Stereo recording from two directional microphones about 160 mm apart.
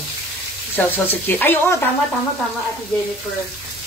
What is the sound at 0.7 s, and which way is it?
Speech, 10° left (ahead or behind).